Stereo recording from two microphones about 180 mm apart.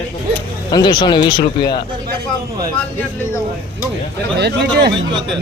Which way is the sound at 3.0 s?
10° left (ahead or behind).